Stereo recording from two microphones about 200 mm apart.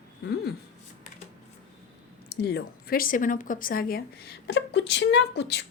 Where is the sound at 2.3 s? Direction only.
55° left (ahead or behind).